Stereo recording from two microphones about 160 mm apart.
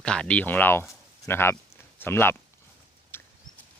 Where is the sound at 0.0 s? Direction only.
5° left (ahead or behind).